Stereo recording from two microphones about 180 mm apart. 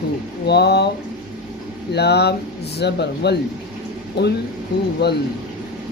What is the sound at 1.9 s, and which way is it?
Speech, 65° left (ahead or behind).